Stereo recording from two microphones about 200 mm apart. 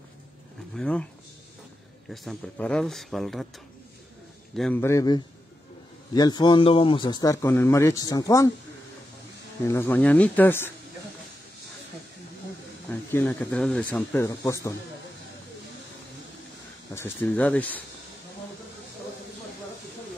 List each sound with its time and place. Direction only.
0.7 s speech: 5° left (ahead or behind)
2.0 s speech: 5° left (ahead or behind)
4.6 s a man's voice: 5° left (ahead or behind)
9.7 s speech: 10° left (ahead or behind)
13.1 s speech: 10° left (ahead or behind)
16.9 s speech: 10° left (ahead or behind)